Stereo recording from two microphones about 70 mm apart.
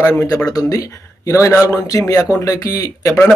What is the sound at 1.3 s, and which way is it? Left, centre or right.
A man's voice, left.